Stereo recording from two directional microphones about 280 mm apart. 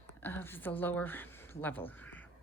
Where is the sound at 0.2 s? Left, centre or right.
Centre.